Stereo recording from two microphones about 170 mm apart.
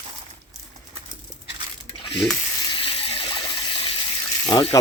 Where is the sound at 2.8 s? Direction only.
30° left (ahead or behind).